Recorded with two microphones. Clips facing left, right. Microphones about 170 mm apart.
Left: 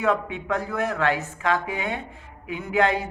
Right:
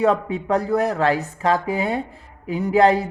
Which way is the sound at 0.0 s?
35° right (ahead or behind).